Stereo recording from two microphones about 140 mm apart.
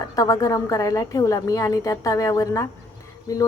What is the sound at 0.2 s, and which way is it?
Speech, 25° left (ahead or behind).